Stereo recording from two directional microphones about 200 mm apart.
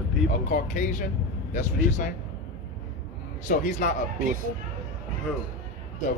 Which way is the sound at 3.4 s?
40° left (ahead or behind).